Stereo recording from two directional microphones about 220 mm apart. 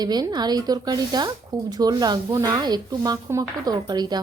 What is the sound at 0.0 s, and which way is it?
A woman's voice, 20° right (ahead or behind).